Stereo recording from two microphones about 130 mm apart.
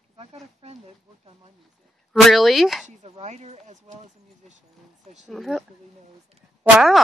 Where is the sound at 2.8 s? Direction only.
55° right (ahead or behind).